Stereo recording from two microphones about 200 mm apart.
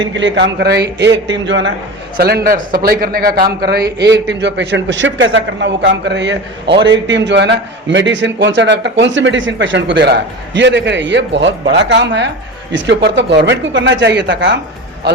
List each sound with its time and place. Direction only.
0.1 s a man's voice: 65° right (ahead or behind)
2.1 s a man's voice: 50° right (ahead or behind)